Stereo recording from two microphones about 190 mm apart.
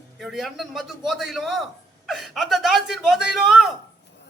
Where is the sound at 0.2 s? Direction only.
Centre (ahead or behind).